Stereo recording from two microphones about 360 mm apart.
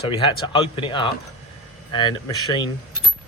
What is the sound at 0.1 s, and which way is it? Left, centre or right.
Speech, centre.